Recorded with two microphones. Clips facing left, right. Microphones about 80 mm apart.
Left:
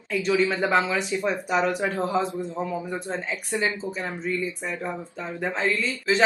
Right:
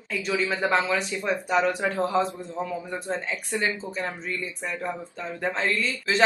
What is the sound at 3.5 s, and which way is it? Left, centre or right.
Speech, centre.